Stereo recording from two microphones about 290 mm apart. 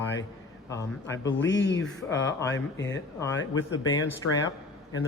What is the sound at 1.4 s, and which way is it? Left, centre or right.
Speech, left.